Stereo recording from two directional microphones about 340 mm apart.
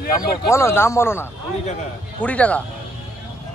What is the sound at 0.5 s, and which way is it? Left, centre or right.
A man's voice, centre.